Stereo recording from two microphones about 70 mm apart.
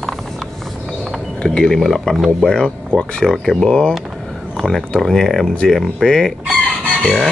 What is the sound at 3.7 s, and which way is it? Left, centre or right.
Speech, centre.